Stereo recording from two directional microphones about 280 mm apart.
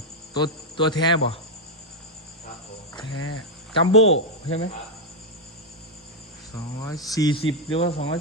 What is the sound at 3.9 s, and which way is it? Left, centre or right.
Speech, left.